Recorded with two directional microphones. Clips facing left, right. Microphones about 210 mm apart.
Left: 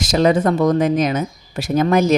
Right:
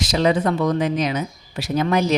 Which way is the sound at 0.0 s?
45° left (ahead or behind).